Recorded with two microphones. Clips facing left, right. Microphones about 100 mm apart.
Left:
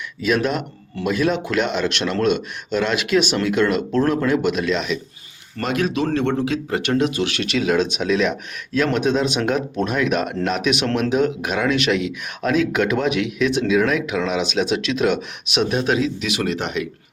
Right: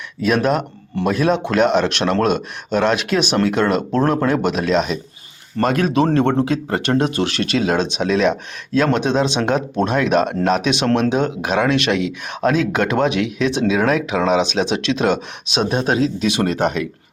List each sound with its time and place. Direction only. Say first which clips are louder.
0.2 s speech: right 3 dB; 45° right (ahead or behind)